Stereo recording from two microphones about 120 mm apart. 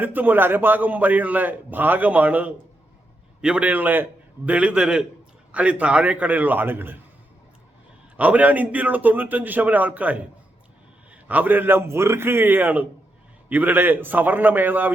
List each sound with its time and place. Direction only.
0.0 s a man's voice: 15° right (ahead or behind)
8.1 s a man's voice: 10° right (ahead or behind)